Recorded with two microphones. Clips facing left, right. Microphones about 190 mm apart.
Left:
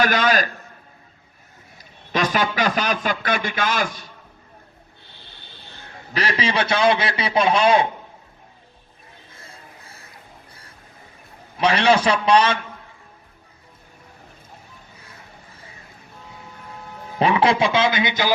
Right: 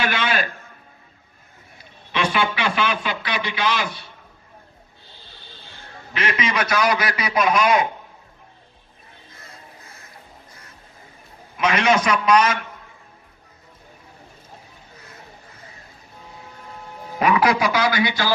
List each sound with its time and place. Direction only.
0.0 s a man's voice: 40° left (ahead or behind)
1.8 s a man's voice: 40° left (ahead or behind)
6.1 s a man's voice: 35° left (ahead or behind)
11.5 s a man's voice: 35° left (ahead or behind)
17.2 s a man's voice: 30° left (ahead or behind)